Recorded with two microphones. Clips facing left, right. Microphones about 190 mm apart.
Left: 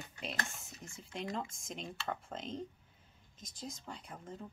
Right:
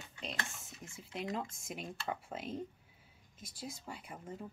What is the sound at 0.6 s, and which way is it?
Speech, centre (ahead or behind).